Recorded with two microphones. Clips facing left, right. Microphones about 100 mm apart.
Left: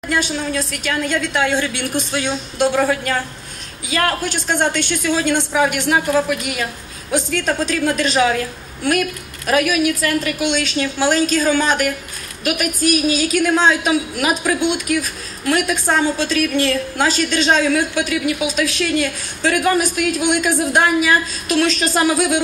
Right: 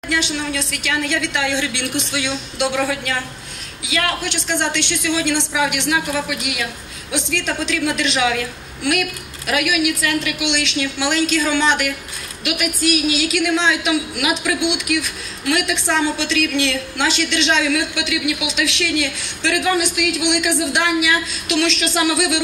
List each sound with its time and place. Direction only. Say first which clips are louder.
0.1 s a woman's voice: left 2 dB; 45° left (ahead or behind)